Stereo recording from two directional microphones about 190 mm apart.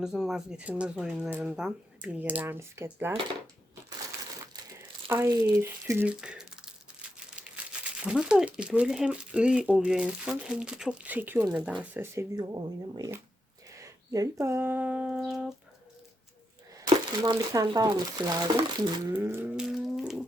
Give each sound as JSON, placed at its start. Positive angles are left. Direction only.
{"t": 0.0, "sound": "speech", "side_deg": -5}
{"t": 4.8, "sound": "speech", "side_deg": -10}
{"t": 7.3, "sound": "crumpling", "side_deg": -5}
{"t": 8.0, "sound": "speech", "side_deg": -5}
{"t": 16.7, "sound": "speech", "side_deg": -20}
{"t": 19.1, "sound": "a sound", "side_deg": -10}